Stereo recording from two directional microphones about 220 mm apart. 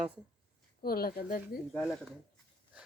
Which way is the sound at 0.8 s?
45° left (ahead or behind).